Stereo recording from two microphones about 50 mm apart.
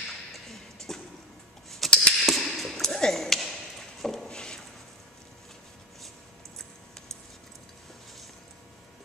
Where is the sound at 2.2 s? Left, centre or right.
Centre.